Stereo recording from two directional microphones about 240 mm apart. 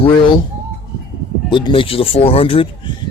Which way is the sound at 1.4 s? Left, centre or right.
Centre.